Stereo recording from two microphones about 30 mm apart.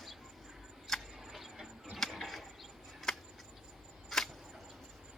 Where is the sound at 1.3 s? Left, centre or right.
Centre.